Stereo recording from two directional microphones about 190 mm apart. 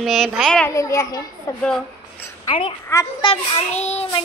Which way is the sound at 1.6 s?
10° left (ahead or behind).